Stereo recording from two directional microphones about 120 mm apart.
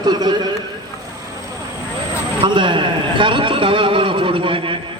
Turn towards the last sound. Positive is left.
turn(degrees=-45)  # may be behind; listen again after turning